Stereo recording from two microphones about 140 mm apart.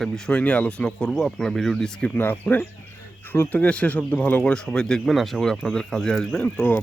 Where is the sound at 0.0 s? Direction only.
5° left (ahead or behind).